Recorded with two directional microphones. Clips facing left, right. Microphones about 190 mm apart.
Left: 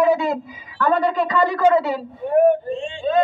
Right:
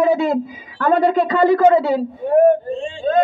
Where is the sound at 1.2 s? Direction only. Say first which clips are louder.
Right 5 dB; 30° right (ahead or behind).